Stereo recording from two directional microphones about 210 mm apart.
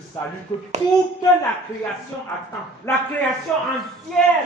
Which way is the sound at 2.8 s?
10° left (ahead or behind).